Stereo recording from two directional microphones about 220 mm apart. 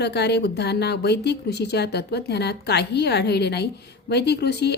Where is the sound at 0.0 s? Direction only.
50° left (ahead or behind).